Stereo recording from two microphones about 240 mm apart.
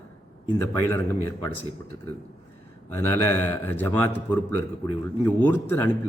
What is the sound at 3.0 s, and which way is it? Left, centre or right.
A man's voice, centre.